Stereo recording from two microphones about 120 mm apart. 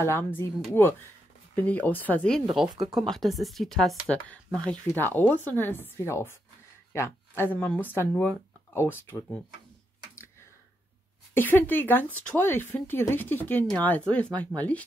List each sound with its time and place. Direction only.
0.0 s a woman's voice: 20° left (ahead or behind)
2.8 s speech: centre (ahead or behind)
4.6 s a woman's voice: 15° left (ahead or behind)
11.3 s speech: 15° left (ahead or behind)